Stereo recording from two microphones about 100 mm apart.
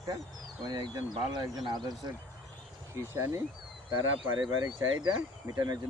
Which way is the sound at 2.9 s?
30° right (ahead or behind).